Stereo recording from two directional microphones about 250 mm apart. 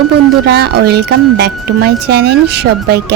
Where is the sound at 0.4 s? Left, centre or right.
Right.